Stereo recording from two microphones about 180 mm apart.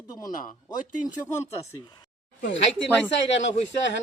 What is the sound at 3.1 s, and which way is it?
Speech, 90° left.